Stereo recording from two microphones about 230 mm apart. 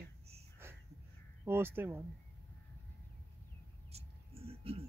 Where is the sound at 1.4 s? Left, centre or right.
Centre.